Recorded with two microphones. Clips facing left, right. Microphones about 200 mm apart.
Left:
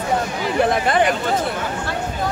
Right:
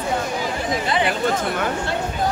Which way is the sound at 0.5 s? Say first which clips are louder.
Left 8 dB; 60° left (ahead or behind).